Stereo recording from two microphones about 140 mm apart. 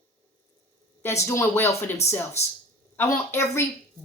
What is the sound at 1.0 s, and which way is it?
A woman's voice, 20° left (ahead or behind).